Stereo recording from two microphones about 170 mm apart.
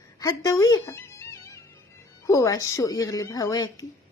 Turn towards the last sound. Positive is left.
turn(degrees=20)  # may be behind; listen again after turning